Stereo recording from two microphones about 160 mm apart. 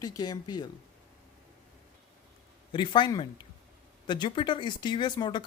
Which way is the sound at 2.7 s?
30° left (ahead or behind).